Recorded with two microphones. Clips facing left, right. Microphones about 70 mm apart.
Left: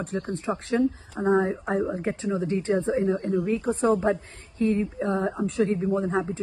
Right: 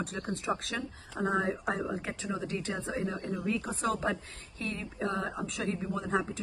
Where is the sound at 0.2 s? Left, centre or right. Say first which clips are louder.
Left 4 dB; left.